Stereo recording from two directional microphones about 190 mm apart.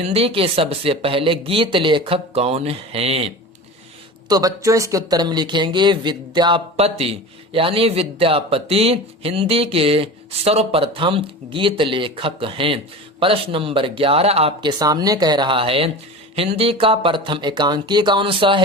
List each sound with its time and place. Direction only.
0.0 s speech: 30° right (ahead or behind)
4.3 s speech: 20° right (ahead or behind)